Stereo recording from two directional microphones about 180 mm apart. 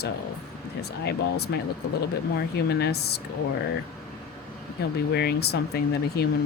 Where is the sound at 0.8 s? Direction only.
65° left (ahead or behind).